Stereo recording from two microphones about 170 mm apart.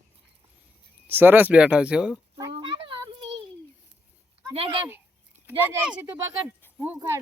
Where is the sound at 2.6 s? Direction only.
30° right (ahead or behind).